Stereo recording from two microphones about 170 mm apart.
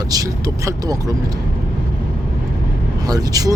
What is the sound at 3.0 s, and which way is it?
Speech, 20° right (ahead or behind).